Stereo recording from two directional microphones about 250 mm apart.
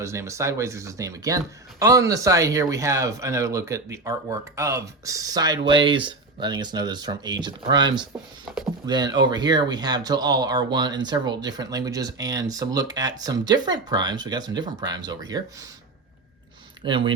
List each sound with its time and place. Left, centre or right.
0.0 s speech: centre
8.9 s speech: centre
16.8 s speech: centre